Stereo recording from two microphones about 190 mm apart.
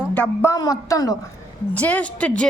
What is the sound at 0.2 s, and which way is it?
Speech, 15° left (ahead or behind).